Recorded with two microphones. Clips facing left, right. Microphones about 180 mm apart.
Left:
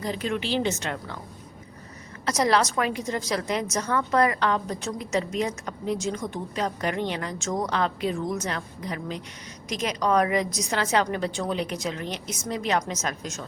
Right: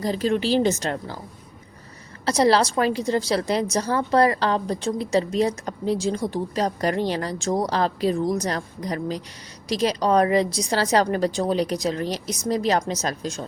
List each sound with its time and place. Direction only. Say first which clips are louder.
0.0 s a woman's voice: right 6 dB; 35° right (ahead or behind)
2.2 s a woman's voice: right 4 dB; 30° right (ahead or behind)